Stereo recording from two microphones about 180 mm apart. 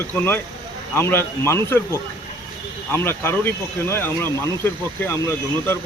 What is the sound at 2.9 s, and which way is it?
Speech, 15° left (ahead or behind).